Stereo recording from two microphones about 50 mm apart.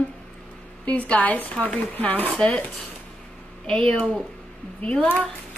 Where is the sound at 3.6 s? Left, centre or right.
Centre.